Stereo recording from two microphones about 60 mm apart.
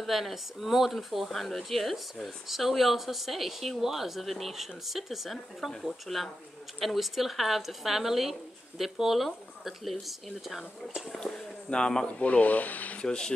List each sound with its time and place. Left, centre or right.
0.0 s speech: centre
11.1 s speech: centre; by 13.0 s left
13.0 s speech: centre